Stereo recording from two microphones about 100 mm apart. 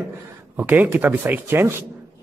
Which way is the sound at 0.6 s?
20° right (ahead or behind).